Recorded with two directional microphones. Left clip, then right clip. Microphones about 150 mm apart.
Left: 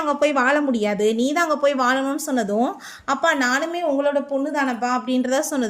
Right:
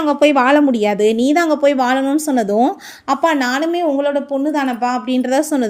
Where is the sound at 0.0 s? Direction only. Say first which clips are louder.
Right 6 dB; 45° right (ahead or behind).